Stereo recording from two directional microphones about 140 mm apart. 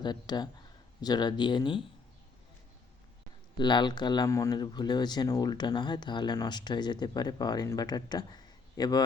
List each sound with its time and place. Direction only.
0.0 s speech: 30° left (ahead or behind)
3.6 s speech: 30° left (ahead or behind)